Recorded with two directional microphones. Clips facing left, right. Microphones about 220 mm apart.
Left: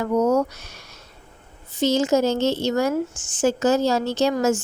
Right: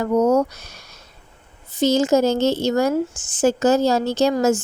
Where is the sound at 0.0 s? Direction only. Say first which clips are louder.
Right 2 dB; 40° right (ahead or behind).